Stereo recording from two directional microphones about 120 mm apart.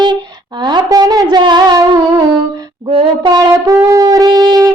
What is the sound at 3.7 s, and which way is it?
Shofar, 25° right (ahead or behind).